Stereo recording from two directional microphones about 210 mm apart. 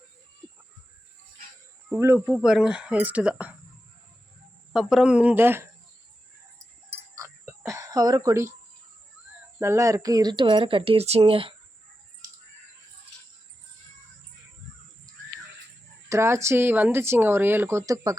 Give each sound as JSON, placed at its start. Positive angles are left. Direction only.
{"t": 1.9, "sound": "speech", "side_deg": -10}
{"t": 4.7, "sound": "speech", "side_deg": -5}
{"t": 7.2, "sound": "a sound", "side_deg": -15}
{"t": 9.6, "sound": "speech", "side_deg": -15}
{"t": 16.0, "sound": "speech", "side_deg": -15}